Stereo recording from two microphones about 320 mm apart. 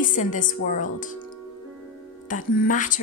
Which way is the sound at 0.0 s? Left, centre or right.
Left.